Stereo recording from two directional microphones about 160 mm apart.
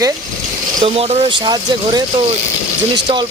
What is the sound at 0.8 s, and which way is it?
Speech, 40° right (ahead or behind).